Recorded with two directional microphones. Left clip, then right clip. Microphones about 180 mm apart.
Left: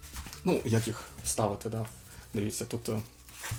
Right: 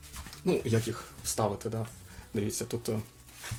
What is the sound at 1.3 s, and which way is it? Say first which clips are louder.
Speech: even; 15° right (ahead or behind).